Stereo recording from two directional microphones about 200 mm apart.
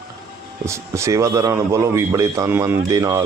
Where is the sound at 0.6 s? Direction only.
15° right (ahead or behind).